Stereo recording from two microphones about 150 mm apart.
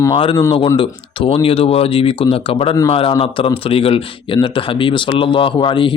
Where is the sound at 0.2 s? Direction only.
35° left (ahead or behind).